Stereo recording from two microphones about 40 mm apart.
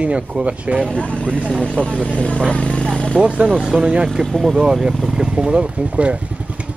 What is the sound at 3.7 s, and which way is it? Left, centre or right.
Speech, right.